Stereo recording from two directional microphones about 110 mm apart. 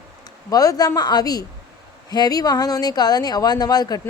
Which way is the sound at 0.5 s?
35° left (ahead or behind).